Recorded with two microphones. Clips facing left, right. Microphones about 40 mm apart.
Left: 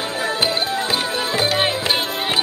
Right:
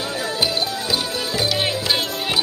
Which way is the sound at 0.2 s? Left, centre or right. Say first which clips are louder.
Left 2 dB; left.